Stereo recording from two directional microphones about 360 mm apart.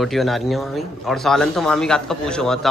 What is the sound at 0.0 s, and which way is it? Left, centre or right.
Speech, centre.